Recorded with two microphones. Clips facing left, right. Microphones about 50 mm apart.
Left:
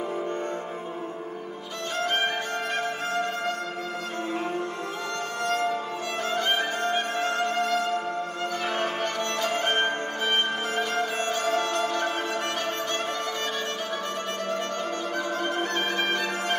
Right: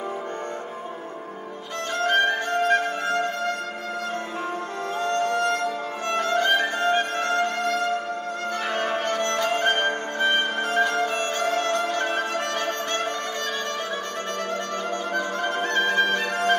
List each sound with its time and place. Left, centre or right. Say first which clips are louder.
2.0 s music: right 6 dB; right
5.1 s music: right 5 dB; right
15.4 s music: right 6 dB; right